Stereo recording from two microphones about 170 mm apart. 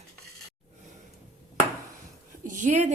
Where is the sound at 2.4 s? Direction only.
50° right (ahead or behind).